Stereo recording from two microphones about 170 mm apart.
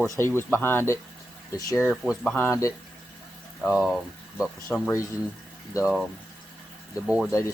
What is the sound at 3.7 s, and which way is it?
Speech, centre (ahead or behind).